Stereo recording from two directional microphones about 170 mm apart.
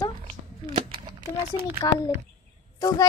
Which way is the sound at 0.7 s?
30° right (ahead or behind).